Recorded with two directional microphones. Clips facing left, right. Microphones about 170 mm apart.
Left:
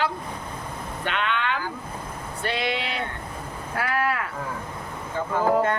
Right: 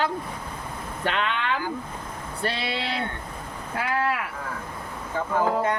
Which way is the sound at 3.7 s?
20° right (ahead or behind).